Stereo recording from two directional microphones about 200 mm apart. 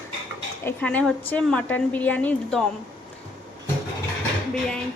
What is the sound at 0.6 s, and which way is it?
A woman's voice, 5° left (ahead or behind).